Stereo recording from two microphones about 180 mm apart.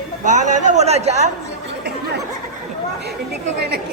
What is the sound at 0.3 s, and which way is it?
A man's voice, 40° right (ahead or behind).